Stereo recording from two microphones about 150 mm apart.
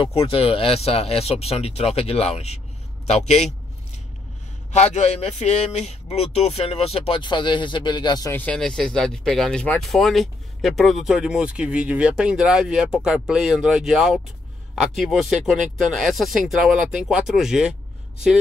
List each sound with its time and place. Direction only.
0.0 s speech: 40° left (ahead or behind)
4.7 s speech: 50° left (ahead or behind); by 8.3 s 30° left (ahead or behind)
8.3 s speech: 10° left (ahead or behind)